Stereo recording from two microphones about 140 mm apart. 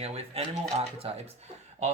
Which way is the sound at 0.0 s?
45° right (ahead or behind).